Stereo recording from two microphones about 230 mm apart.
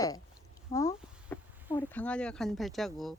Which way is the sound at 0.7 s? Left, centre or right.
Centre.